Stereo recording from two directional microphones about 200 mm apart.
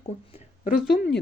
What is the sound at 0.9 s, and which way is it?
Speech, 50° left (ahead or behind).